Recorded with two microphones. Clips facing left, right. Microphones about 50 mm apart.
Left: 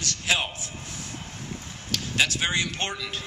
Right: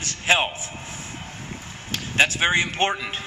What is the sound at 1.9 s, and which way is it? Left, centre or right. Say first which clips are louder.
A man's voice: right 4 dB; right.